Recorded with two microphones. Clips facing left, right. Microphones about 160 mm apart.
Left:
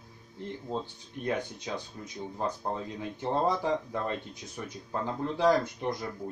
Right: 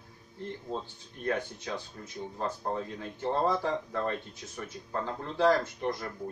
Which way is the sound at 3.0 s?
15° left (ahead or behind).